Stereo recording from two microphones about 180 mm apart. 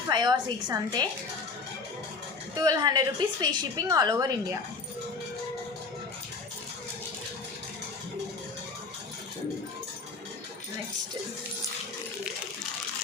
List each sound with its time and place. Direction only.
0.1 s a woman's voice: 20° right (ahead or behind)
2.6 s a woman's voice: 20° right (ahead or behind)